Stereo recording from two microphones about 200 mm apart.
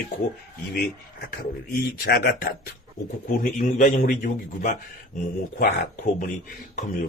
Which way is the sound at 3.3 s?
40° left (ahead or behind).